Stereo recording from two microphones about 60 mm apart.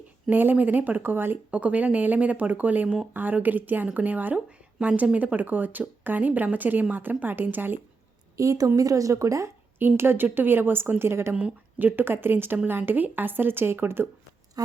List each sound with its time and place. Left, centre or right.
0.3 s a woman's voice: right
1.5 s a woman's voice: right
8.4 s a woman's voice: right
9.7 s a woman's voice: right